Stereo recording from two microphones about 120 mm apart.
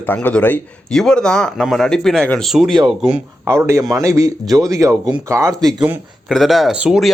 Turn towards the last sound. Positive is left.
turn(degrees=-5)  # may be behind; listen again after turning